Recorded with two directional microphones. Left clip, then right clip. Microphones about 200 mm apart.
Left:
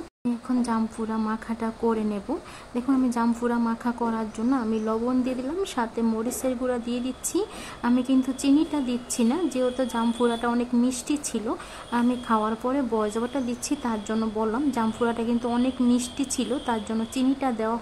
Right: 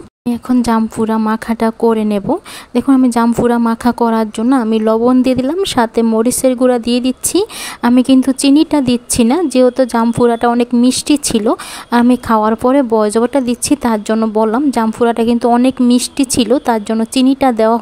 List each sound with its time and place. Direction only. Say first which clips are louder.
0.3 s speech: right 13 dB; 45° right (ahead or behind)